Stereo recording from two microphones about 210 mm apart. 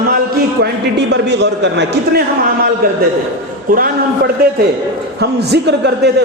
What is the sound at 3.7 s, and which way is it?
A woman's voice, 45° right (ahead or behind).